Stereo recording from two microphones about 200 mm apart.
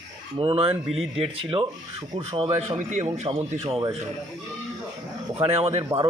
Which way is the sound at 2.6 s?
35° right (ahead or behind).